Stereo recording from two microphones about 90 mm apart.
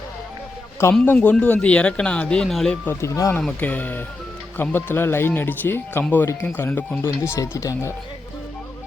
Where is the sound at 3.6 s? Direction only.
20° left (ahead or behind).